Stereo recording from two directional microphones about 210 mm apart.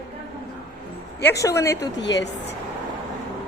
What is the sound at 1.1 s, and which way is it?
Speech, 15° left (ahead or behind).